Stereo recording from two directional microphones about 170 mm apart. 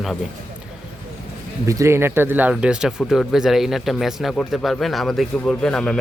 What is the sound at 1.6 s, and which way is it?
Speech, 20° right (ahead or behind).